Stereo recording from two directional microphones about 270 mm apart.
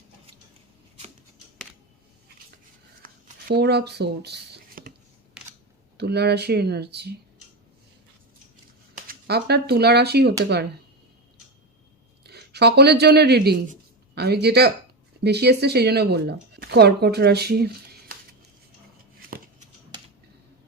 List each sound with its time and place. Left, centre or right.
3.5 s speech: right
6.0 s speech: right
9.0 s speech: right
12.2 s speech: right